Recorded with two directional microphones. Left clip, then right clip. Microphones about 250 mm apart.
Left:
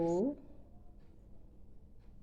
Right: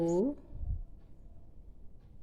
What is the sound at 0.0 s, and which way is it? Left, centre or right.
Speech, centre.